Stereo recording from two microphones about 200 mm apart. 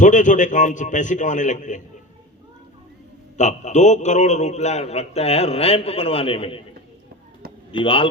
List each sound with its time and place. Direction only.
0.0 s a man's voice: 40° left (ahead or behind)
3.3 s a man's voice: 35° left (ahead or behind)
7.7 s speech: 25° left (ahead or behind)